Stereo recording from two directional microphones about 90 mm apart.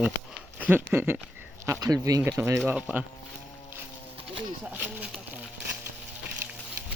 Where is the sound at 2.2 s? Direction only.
30° right (ahead or behind).